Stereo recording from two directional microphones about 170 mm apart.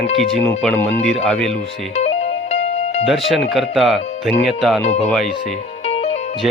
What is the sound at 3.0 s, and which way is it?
Speech, centre (ahead or behind).